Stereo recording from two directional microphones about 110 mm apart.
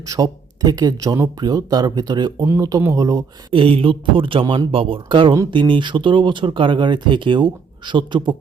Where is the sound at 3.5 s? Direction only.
55° right (ahead or behind).